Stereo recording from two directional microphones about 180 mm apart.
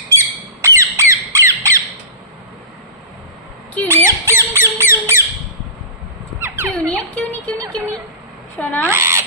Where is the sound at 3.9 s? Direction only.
15° right (ahead or behind).